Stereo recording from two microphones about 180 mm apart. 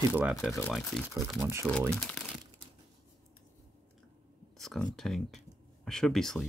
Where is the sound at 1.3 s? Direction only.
10° right (ahead or behind).